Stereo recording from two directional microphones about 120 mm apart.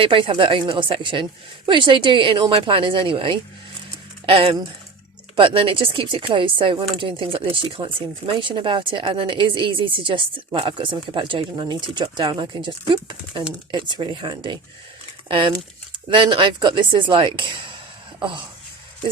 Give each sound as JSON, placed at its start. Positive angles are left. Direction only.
{"t": 0.0, "sound": "speech", "side_deg": -45}